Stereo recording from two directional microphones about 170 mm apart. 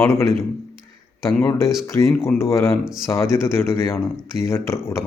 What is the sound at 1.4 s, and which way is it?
A man's voice, 15° left (ahead or behind).